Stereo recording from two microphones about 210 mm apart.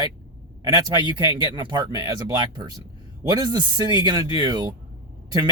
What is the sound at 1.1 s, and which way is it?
Speech, 20° right (ahead or behind).